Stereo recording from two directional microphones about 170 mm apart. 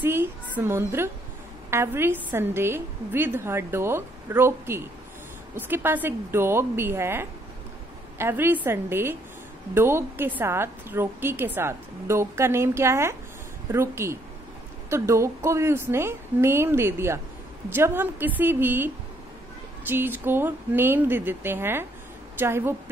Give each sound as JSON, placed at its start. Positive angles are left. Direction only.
{"t": 0.0, "sound": "a woman's voice", "side_deg": -15}
{"t": 19.9, "sound": "a woman's voice", "side_deg": -10}